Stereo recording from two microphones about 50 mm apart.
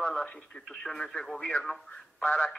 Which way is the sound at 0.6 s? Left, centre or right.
Centre.